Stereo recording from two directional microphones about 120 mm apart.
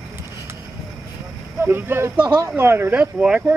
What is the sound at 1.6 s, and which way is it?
Speech, 20° right (ahead or behind).